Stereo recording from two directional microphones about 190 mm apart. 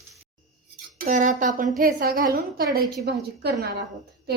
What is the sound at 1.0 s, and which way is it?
A woman's voice, 40° right (ahead or behind).